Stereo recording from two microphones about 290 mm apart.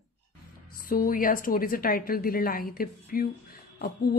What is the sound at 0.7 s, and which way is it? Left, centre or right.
A woman's voice, left.